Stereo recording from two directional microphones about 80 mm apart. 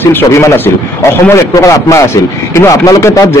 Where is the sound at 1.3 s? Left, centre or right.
Left.